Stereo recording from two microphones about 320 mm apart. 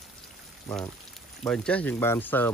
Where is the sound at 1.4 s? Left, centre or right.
Centre.